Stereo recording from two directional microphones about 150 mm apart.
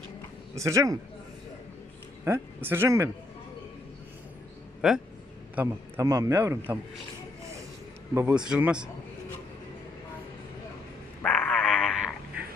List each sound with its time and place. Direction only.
0.5 s a man's voice: 20° right (ahead or behind)
2.2 s speech: 15° right (ahead or behind)
4.8 s a man's voice: 5° right (ahead or behind)
5.5 s a man's voice: 20° right (ahead or behind)
8.1 s a man's voice: 15° right (ahead or behind)
11.2 s a sound: 5° left (ahead or behind)